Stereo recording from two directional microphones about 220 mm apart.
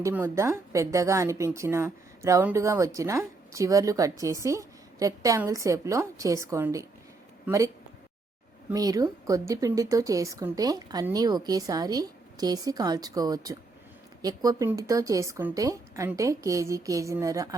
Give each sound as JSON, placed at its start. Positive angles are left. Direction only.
{"t": 0.0, "sound": "a woman's voice", "side_deg": -10}
{"t": 8.7, "sound": "a woman's voice", "side_deg": -15}